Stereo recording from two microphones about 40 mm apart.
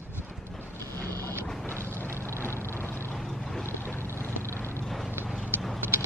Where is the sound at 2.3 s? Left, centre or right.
Left.